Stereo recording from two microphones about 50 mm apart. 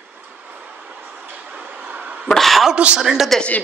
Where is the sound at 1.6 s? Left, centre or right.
Right.